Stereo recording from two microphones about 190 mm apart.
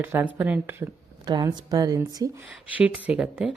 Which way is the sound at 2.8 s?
5° right (ahead or behind).